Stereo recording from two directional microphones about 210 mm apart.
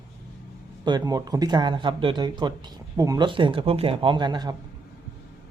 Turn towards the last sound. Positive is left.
turn(degrees=-20)  # may be behind; listen again after turning